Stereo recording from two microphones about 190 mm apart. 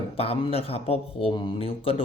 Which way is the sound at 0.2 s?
30° left (ahead or behind).